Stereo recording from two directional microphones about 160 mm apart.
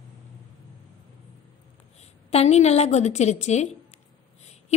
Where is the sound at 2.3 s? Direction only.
40° left (ahead or behind).